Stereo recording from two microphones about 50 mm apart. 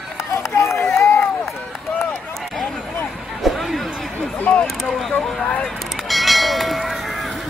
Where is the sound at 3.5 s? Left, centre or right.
Centre.